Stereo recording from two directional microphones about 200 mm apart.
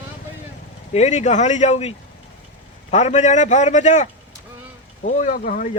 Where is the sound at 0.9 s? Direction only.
35° left (ahead or behind).